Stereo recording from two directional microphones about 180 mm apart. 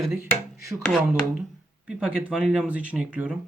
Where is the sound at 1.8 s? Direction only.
5° right (ahead or behind).